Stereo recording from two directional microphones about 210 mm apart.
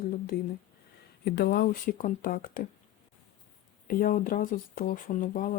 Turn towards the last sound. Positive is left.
turn(degrees=40)  # may be behind; listen again after turning